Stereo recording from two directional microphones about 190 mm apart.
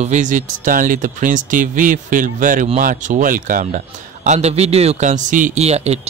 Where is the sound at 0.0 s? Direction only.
40° right (ahead or behind).